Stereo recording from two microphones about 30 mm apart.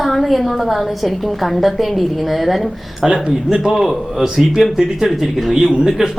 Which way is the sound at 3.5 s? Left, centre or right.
Centre.